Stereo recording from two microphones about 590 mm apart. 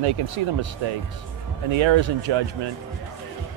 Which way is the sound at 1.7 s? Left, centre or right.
Right.